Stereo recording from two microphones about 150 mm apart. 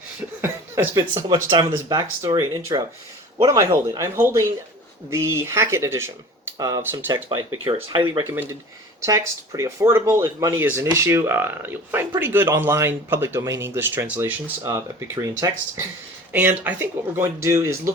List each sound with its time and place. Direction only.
0.4 s speech: 15° right (ahead or behind)
1.5 s speech: 25° right (ahead or behind)
9.0 s speech: 20° right (ahead or behind)
16.3 s speech: 10° right (ahead or behind)